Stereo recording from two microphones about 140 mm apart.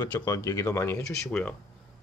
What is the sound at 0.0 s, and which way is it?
Speech, 30° left (ahead or behind).